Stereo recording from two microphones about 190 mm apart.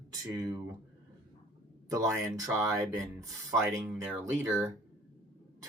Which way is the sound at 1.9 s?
15° right (ahead or behind).